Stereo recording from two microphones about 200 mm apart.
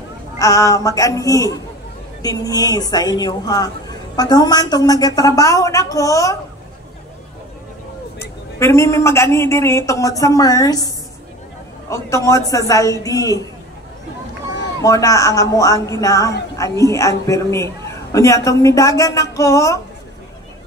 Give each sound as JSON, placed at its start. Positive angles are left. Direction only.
{"t": 0.4, "sound": "a man's voice", "side_deg": 15}
{"t": 8.2, "sound": "a man's voice", "side_deg": 15}
{"t": 11.9, "sound": "a man's voice", "side_deg": 15}
{"t": 14.8, "sound": "a man's voice", "side_deg": 15}